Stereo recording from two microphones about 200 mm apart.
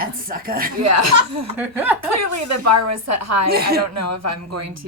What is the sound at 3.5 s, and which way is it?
Speech, 50° right (ahead or behind).